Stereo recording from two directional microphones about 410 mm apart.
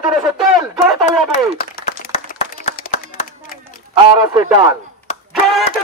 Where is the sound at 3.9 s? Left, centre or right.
Centre.